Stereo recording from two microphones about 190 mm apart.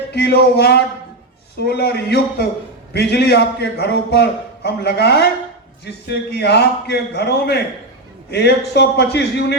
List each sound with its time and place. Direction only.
0.1 s a man's voice: 60° left (ahead or behind)
6.3 s a man's voice: 60° left (ahead or behind)